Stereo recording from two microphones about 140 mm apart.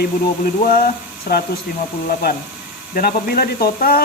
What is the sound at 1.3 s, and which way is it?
Speech, 90° left.